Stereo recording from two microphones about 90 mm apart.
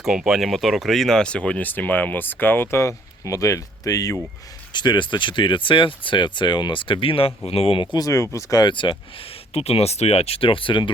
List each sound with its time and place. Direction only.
0.0 s speech: 5° right (ahead or behind); by 4.2 s 40° left (ahead or behind)
4.7 s speech: 55° left (ahead or behind); by 7.9 s 85° left
7.9 s speech: 40° left (ahead or behind)
8.6 s speech: 65° left (ahead or behind)